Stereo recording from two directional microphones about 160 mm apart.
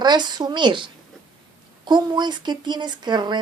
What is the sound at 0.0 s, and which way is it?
Speech, 25° right (ahead or behind).